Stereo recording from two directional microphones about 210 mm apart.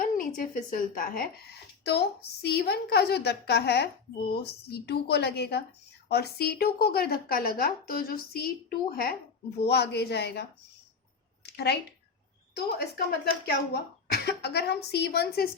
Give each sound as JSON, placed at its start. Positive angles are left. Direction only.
{"t": 0.0, "sound": "a woman's voice", "side_deg": 40}
{"t": 11.4, "sound": "a sound", "side_deg": 50}
{"t": 12.5, "sound": "speech", "side_deg": 50}